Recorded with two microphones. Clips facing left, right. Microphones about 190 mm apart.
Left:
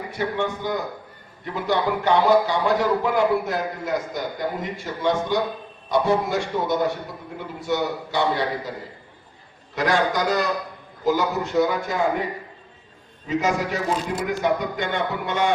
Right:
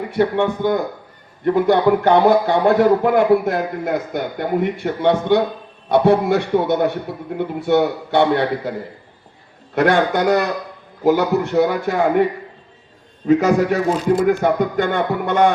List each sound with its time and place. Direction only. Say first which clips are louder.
0.1 s a man's voice: right 8 dB; 60° right (ahead or behind)
9.7 s a man's voice: right 6 dB; 60° right (ahead or behind)